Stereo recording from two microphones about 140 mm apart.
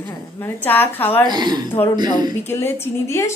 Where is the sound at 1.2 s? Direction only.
30° right (ahead or behind).